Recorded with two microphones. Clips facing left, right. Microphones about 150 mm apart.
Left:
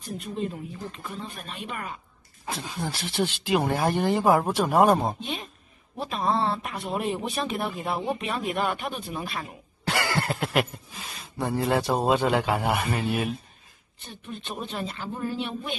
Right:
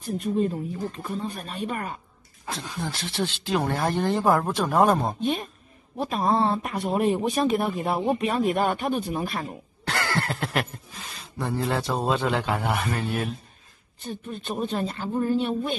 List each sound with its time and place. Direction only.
0.0 s speech: 45° right (ahead or behind)
2.4 s speech: 5° left (ahead or behind)
5.2 s speech: 45° right (ahead or behind)
9.8 s speech: centre (ahead or behind)
14.0 s speech: 40° right (ahead or behind)